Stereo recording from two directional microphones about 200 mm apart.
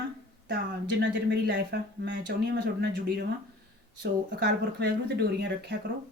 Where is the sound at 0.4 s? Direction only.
60° right (ahead or behind).